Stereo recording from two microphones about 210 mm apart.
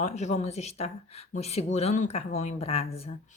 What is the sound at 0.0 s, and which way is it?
Speech, 35° left (ahead or behind).